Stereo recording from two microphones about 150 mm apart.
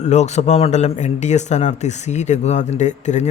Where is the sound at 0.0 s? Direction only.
50° left (ahead or behind).